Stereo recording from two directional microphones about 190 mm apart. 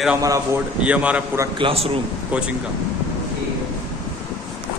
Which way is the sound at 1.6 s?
30° right (ahead or behind).